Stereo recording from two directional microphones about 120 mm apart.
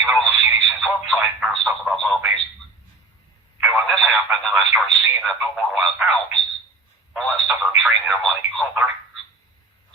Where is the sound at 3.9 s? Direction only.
5° right (ahead or behind).